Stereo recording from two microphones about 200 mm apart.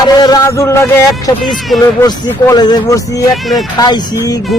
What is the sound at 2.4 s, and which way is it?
Speech, 20° left (ahead or behind).